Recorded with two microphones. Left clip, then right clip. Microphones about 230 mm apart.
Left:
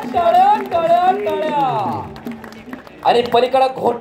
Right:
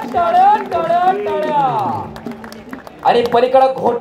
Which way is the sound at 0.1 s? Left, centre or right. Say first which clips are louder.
Right 1 dB; left.